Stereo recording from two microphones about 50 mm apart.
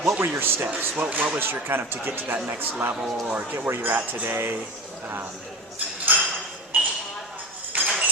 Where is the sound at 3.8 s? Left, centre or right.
Right.